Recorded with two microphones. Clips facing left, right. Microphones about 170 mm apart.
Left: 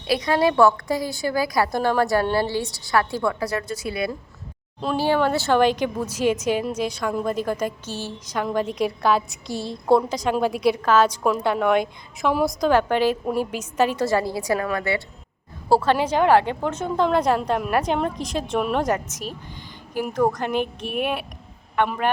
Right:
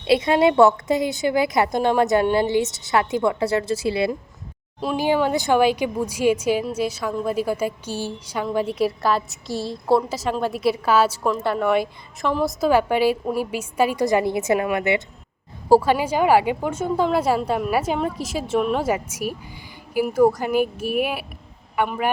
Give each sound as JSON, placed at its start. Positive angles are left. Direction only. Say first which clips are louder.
{"t": 0.1, "sound": "a woman's voice", "louder": "right 3 dB", "side_deg": -25}
{"t": 4.9, "sound": "a woman's voice", "louder": "even", "side_deg": -15}
{"t": 12.3, "sound": "a woman's voice", "louder": "left 1 dB", "side_deg": 10}
{"t": 12.5, "sound": "a woman's voice", "louder": "right 1 dB", "side_deg": -5}